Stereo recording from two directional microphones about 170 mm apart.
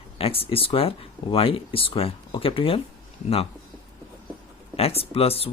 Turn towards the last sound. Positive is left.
turn(degrees=35)  # may be behind; listen again after turning